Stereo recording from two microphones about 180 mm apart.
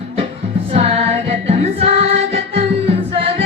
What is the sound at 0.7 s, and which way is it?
Music, 35° right (ahead or behind).